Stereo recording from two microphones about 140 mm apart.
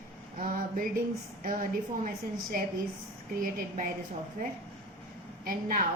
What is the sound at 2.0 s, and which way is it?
A woman's voice, 80° right.